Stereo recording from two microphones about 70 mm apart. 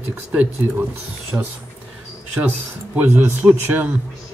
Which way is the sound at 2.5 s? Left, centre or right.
Right.